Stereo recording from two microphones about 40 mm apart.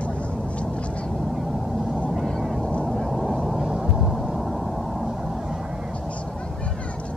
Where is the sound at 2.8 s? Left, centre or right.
Centre.